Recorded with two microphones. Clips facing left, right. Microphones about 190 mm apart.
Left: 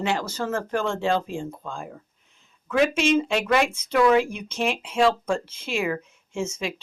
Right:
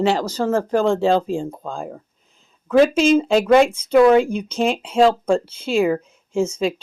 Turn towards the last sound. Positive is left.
turn(degrees=-35)  # may be behind; listen again after turning